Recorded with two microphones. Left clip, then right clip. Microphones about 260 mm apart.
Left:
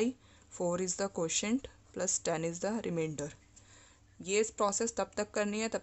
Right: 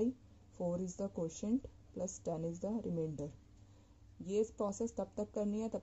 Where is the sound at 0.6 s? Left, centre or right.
Left.